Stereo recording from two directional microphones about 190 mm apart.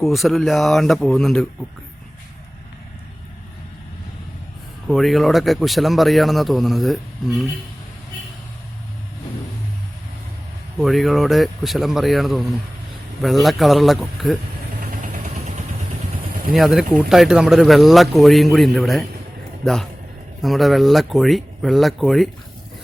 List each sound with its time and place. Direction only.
0.0 s speech: centre (ahead or behind)
4.9 s speech: centre (ahead or behind)
10.8 s speech: centre (ahead or behind)
15.2 s vehicle: 35° right (ahead or behind)
16.6 s speech: centre (ahead or behind)